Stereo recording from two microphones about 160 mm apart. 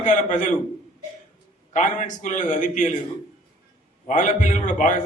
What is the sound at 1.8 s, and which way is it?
A man's voice, 50° left (ahead or behind).